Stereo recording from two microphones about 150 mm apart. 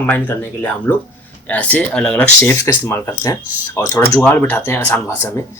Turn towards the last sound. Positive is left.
turn(degrees=15)  # may be behind; listen again after turning